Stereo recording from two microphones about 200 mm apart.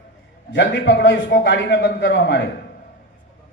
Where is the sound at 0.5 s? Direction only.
60° left (ahead or behind).